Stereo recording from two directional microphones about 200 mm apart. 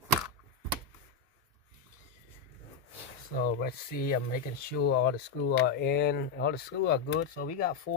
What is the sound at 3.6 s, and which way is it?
Speech, 45° left (ahead or behind).